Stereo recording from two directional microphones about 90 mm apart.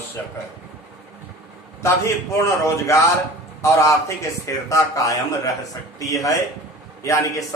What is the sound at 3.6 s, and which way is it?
A man's voice, 35° left (ahead or behind).